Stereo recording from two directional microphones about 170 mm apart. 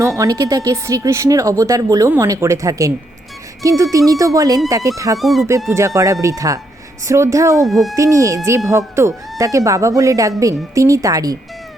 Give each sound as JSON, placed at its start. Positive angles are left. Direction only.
{"t": 0.0, "sound": "speech", "side_deg": -20}
{"t": 5.1, "sound": "speech", "side_deg": 0}
{"t": 5.5, "sound": "speech", "side_deg": -15}
{"t": 7.7, "sound": "speech", "side_deg": 0}
{"t": 7.9, "sound": "speech", "side_deg": -20}